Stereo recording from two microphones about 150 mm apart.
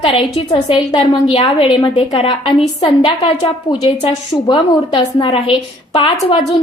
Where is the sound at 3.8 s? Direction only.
45° left (ahead or behind).